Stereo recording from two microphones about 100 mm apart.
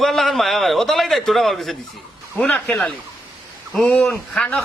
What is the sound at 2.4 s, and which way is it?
Speech, 15° left (ahead or behind).